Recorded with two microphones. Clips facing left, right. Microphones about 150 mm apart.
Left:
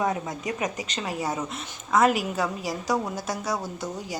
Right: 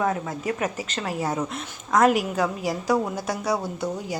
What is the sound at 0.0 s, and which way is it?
Speech, 15° left (ahead or behind).